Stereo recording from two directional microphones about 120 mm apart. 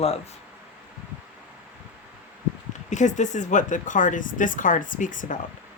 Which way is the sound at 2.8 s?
90° left.